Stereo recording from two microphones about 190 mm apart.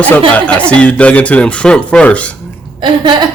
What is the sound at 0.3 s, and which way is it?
Speech, 5° left (ahead or behind).